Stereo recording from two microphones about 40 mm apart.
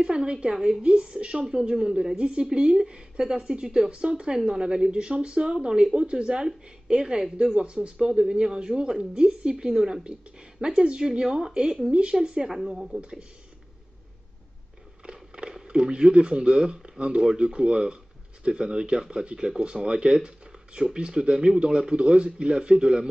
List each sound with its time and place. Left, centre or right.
0.0 s a woman's voice: right
2.1 s a woman's voice: right
7.5 s a woman's voice: right; by 13.0 s centre
15.3 s a woman's voice: right